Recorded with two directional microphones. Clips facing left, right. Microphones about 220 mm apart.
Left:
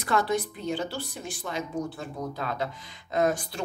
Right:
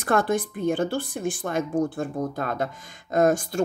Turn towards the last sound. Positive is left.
turn(degrees=-45)  # may be behind; listen again after turning